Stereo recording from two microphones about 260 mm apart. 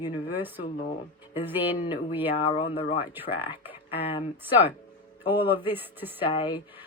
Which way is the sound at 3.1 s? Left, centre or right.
Centre.